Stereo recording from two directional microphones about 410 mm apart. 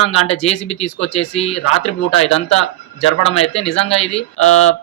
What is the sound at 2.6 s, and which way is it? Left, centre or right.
Speech, left.